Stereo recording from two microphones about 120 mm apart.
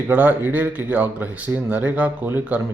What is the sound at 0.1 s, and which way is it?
Speech, 15° right (ahead or behind).